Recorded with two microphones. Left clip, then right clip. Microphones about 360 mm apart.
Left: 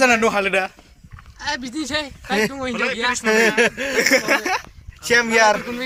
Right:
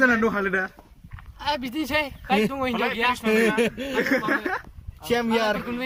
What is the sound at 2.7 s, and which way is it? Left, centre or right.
Speech, right.